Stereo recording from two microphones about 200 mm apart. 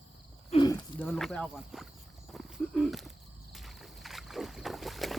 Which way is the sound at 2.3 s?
Centre (ahead or behind).